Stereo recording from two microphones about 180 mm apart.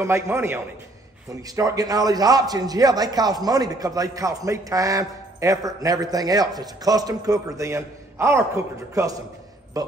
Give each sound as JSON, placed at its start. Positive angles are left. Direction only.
{"t": 0.0, "sound": "a man's voice", "side_deg": -15}